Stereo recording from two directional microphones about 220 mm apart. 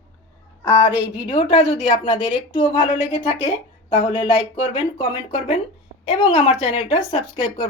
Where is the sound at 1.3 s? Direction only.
25° left (ahead or behind).